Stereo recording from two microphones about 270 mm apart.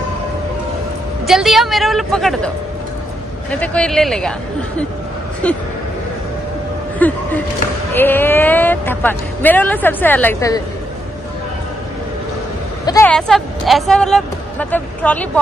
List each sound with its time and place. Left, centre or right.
1.2 s speech: centre
7.0 s speech: centre
12.8 s speech: centre